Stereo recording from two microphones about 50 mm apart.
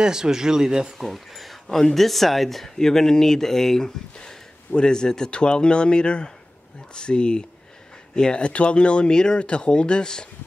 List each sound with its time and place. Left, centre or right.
0.0 s speech: centre
0.9 s speech: centre